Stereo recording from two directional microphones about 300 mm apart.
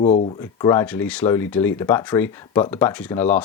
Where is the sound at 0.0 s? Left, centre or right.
Left.